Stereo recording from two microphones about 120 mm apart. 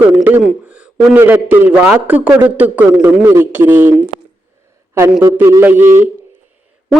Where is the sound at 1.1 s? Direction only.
15° right (ahead or behind).